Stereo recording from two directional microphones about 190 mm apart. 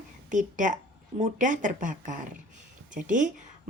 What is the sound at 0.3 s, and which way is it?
A woman's voice, 40° right (ahead or behind).